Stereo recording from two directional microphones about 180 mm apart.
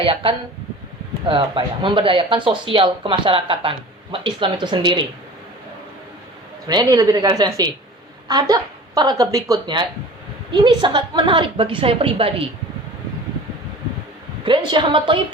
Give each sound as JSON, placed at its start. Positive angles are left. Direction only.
{"t": 0.0, "sound": "speech", "side_deg": -30}
{"t": 6.7, "sound": "speech", "side_deg": -20}
{"t": 14.4, "sound": "speech", "side_deg": -25}